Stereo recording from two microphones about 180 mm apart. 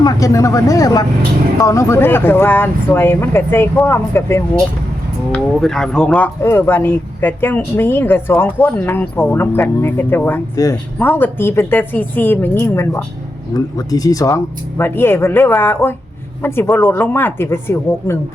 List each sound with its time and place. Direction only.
0.0 s speech: 20° left (ahead or behind)
5.3 s speech: 5° left (ahead or behind)